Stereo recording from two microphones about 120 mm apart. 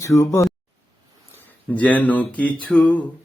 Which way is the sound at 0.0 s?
25° left (ahead or behind).